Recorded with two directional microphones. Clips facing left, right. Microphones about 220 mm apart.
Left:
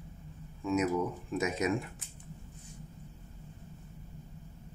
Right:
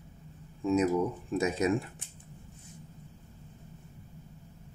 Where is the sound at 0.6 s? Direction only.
30° right (ahead or behind).